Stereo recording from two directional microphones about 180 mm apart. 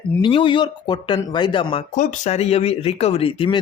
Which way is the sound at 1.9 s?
45° left (ahead or behind).